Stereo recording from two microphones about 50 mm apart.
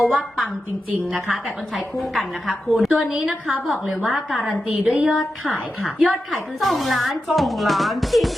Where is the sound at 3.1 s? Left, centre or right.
Centre.